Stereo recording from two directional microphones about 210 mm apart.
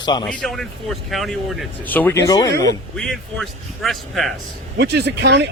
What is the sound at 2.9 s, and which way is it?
Speech, 5° left (ahead or behind).